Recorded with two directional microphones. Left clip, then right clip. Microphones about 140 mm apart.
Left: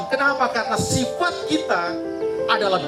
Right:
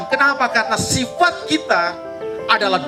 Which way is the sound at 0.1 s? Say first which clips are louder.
Right 4 dB; 30° right (ahead or behind).